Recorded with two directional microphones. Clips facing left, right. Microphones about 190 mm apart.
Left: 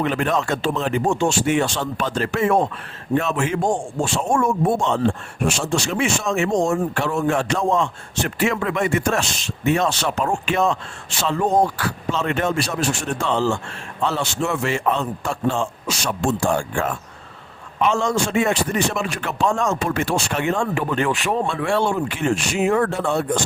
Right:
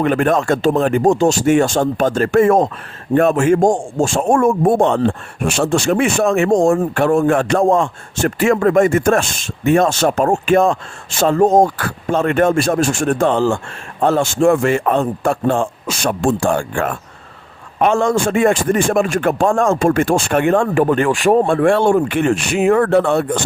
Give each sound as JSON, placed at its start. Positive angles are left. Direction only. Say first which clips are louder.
{"t": 0.0, "sound": "a man's voice", "louder": "right 6 dB", "side_deg": -50}